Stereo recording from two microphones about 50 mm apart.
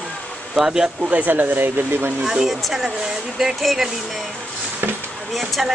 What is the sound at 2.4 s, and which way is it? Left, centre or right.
A woman's voice, centre.